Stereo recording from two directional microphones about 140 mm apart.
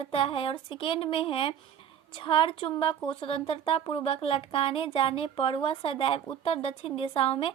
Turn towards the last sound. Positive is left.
turn(degrees=40)  # may be behind; listen again after turning